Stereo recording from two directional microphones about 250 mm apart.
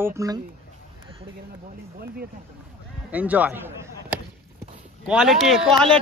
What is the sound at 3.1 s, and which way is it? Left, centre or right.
Speech, centre.